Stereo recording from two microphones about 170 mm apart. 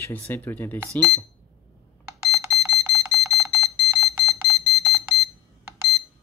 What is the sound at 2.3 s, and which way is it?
Alarm, 20° right (ahead or behind).